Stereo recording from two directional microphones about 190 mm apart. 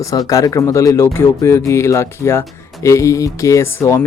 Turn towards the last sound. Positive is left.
turn(degrees=15)  # may be behind; listen again after turning